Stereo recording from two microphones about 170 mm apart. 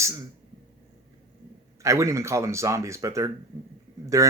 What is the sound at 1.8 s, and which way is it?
Speech, 20° right (ahead or behind).